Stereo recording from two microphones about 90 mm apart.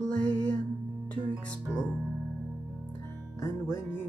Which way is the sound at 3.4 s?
30° left (ahead or behind).